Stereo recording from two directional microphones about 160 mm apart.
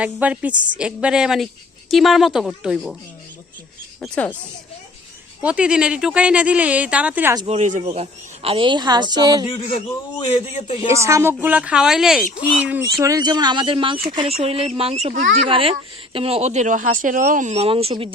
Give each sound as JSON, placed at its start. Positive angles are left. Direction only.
{"t": 0.0, "sound": "speech", "side_deg": -10}
{"t": 0.5, "sound": "a woman's voice", "side_deg": -30}
{"t": 0.8, "sound": "speech", "side_deg": -5}
{"t": 4.0, "sound": "speech", "side_deg": 5}
{"t": 5.4, "sound": "speech", "side_deg": -10}
{"t": 7.4, "sound": "speech", "side_deg": -40}
{"t": 10.2, "sound": "a man's voice", "side_deg": 35}
{"t": 10.9, "sound": "speech", "side_deg": -20}
{"t": 13.1, "sound": "speech", "side_deg": -25}
{"t": 15.4, "sound": "speech", "side_deg": -35}